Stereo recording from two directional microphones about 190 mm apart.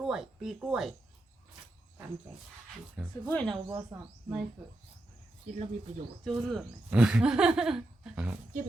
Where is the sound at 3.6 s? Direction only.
15° right (ahead or behind).